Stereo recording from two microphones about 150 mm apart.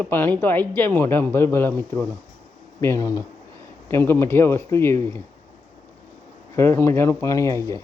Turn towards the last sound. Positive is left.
turn(degrees=20)  # may be behind; listen again after turning